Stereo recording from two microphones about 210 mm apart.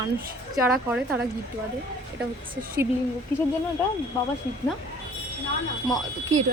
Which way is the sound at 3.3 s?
5° left (ahead or behind).